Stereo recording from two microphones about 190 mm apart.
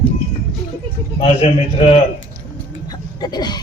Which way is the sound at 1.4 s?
30° left (ahead or behind).